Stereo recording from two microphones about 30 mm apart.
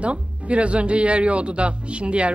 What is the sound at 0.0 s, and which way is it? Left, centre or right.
Speech, right.